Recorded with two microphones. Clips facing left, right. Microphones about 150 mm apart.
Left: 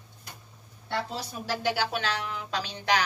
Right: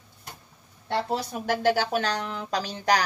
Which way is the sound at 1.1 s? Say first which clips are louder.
Right 6 dB; 55° right (ahead or behind).